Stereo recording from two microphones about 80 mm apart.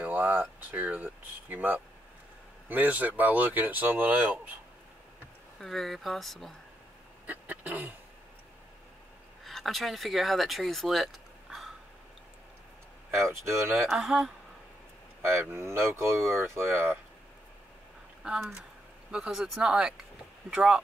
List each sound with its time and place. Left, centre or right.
0.0 s speech: right
5.6 s speech: centre
7.2 s sneeze: right
9.4 s speech: centre
13.5 s speech: right
13.8 s speech: centre
15.5 s speech: right
18.2 s speech: centre